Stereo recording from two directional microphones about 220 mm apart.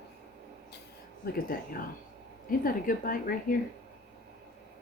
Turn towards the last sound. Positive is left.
turn(degrees=40)  # may be behind; listen again after turning